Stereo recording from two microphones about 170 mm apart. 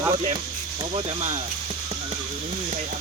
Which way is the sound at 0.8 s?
35° right (ahead or behind).